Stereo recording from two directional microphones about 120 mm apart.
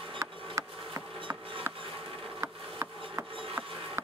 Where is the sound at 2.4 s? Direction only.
20° right (ahead or behind).